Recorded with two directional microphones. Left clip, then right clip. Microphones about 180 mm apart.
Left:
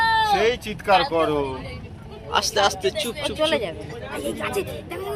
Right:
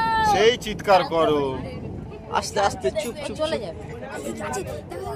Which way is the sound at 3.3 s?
25° left (ahead or behind).